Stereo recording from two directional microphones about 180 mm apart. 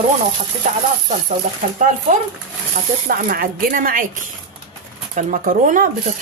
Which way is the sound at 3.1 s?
50° right (ahead or behind).